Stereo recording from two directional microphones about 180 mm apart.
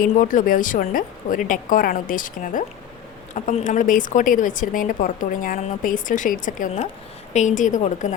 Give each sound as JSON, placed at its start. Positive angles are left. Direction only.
{"t": 0.0, "sound": "a woman's voice", "side_deg": 50}